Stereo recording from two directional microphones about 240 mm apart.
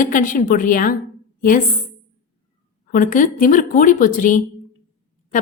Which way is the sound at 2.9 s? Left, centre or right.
Left.